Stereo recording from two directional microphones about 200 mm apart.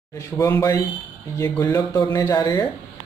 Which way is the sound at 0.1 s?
15° left (ahead or behind).